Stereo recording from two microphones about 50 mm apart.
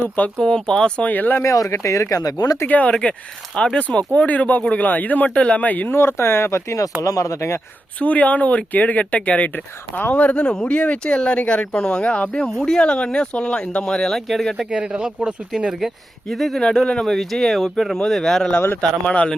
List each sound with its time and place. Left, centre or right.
0.3 s speech: centre
1.1 s speech: left
1.4 s speech: left
2.6 s speech: left
3.5 s speech: centre
3.8 s speech: left
5.9 s speech: left
7.0 s speech: left
7.9 s speech: left; by 14.7 s centre
14.7 s speech: centre
16.3 s speech: centre
16.6 s speech: centre
17.2 s speech: centre
18.8 s speech: left